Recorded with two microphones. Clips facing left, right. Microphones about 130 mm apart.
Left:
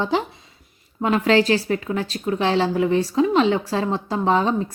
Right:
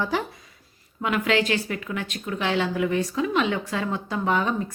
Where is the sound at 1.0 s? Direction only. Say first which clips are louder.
Left 6 dB; 35° left (ahead or behind).